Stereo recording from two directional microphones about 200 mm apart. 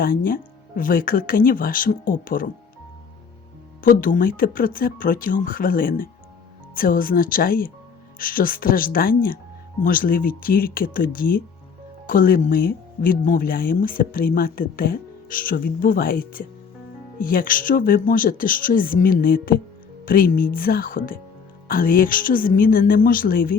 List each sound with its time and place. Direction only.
0.0 s speech: 45° left (ahead or behind)
3.8 s speech: 45° left (ahead or behind)